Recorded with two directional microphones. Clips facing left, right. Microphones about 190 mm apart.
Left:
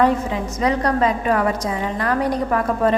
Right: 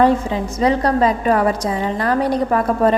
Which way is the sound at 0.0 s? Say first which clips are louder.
Right 3 dB; 30° right (ahead or behind).